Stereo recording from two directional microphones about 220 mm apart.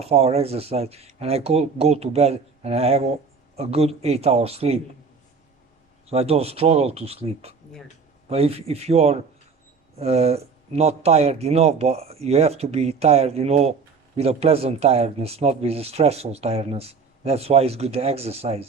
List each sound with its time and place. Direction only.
0.0 s speech: 25° right (ahead or behind)
6.1 s speech: 25° right (ahead or behind)